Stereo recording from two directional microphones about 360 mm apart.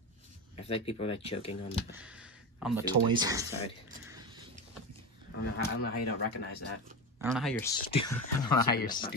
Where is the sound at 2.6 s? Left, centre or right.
Centre.